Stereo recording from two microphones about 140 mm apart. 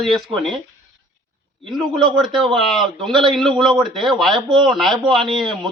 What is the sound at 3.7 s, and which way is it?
Speech, 35° right (ahead or behind).